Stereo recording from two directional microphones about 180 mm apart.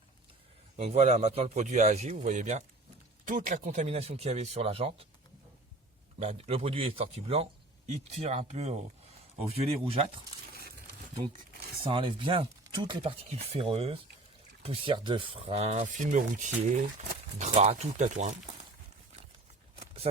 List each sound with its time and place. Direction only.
0.8 s speech: 35° right (ahead or behind)
6.1 s speech: 35° right (ahead or behind)
10.5 s crumpling: 60° right (ahead or behind)
11.8 s speech: 30° right (ahead or behind)